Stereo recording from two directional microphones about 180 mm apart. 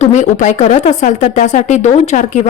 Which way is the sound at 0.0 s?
40° left (ahead or behind).